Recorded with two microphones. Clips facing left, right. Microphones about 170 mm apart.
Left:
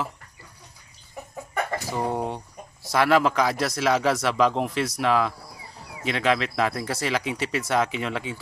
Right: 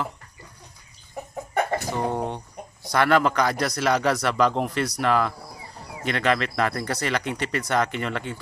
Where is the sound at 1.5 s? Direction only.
35° right (ahead or behind).